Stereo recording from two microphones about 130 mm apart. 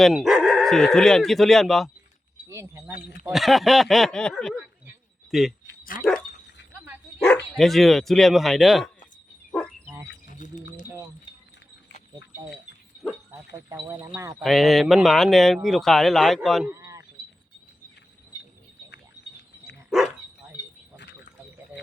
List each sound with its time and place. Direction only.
0.0 s speech: 5° right (ahead or behind)
2.5 s speech: 20° right (ahead or behind)
3.3 s speech: centre (ahead or behind)
7.2 s speech: 10° left (ahead or behind)
9.5 s dog: 5° left (ahead or behind)
10.3 s wind chime: 70° left (ahead or behind)
13.8 s speech: 20° right (ahead or behind)
14.4 s speech: centre (ahead or behind)
16.6 s a sound: 20° right (ahead or behind)